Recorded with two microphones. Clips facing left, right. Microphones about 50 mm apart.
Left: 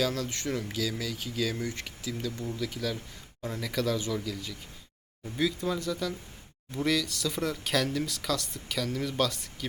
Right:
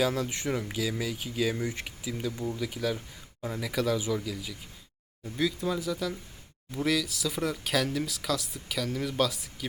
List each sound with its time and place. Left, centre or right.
0.0 s speech: centre